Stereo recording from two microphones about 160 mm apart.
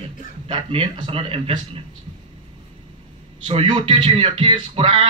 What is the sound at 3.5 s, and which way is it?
A man's voice, 30° right (ahead or behind).